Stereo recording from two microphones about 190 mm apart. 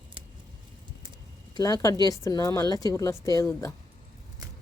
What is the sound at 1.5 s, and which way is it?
Speech, 20° left (ahead or behind).